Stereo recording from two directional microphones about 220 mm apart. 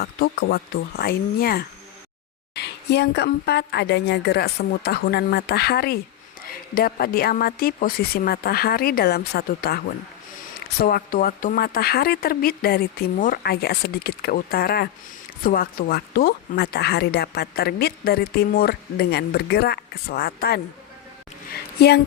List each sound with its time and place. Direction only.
0.0 s a woman's voice: 45° left (ahead or behind)